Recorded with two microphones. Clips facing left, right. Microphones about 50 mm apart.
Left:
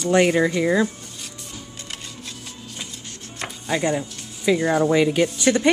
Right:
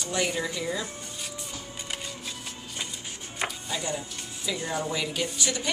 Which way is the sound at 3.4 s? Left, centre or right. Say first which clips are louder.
Right 1 dB; centre.